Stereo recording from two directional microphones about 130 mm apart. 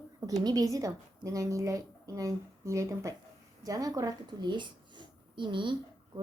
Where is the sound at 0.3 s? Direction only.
30° right (ahead or behind).